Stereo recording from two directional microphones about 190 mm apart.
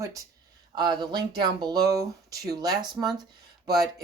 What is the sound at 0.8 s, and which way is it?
Speech, 20° right (ahead or behind).